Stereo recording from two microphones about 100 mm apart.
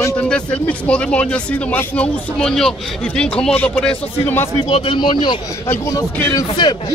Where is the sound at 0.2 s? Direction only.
15° left (ahead or behind).